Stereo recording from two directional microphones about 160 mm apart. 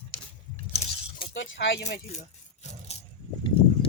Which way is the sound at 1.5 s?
90° left.